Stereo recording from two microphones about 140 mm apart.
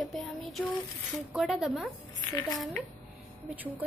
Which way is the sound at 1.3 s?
5° right (ahead or behind).